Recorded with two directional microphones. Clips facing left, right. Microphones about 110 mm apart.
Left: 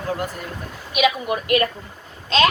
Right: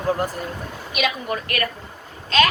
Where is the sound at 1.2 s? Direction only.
20° left (ahead or behind).